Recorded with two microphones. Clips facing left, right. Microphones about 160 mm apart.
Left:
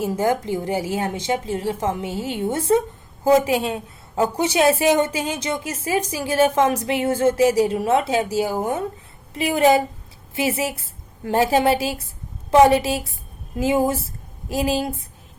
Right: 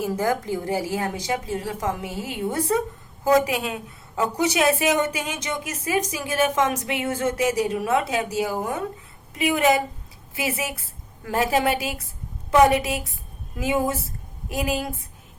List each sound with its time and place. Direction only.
0.0 s a woman's voice: 25° left (ahead or behind)